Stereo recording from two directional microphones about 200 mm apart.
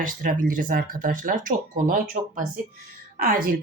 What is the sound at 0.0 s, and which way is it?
Speech, 40° right (ahead or behind).